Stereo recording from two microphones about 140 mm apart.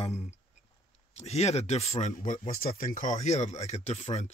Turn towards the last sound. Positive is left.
turn(degrees=50)  # may be behind; listen again after turning